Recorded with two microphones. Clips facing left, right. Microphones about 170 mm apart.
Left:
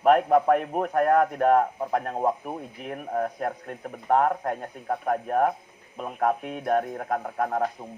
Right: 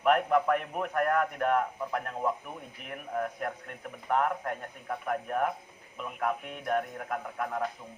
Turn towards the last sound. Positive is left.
turn(degrees=40)  # may be behind; listen again after turning